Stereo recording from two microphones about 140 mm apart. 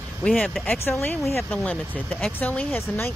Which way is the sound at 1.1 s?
Centre (ahead or behind).